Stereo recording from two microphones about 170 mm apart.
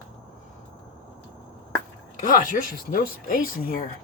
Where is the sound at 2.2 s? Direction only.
50° left (ahead or behind).